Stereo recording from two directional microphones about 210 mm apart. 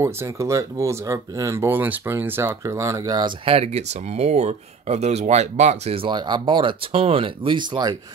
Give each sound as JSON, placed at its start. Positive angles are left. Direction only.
{"t": 0.0, "sound": "speech", "side_deg": -15}